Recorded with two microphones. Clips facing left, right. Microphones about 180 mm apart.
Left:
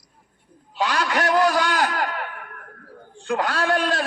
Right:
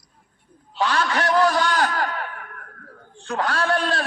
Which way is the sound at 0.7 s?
15° left (ahead or behind).